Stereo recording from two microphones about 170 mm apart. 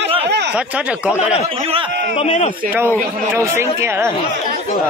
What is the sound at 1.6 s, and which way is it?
Speech, 35° right (ahead or behind).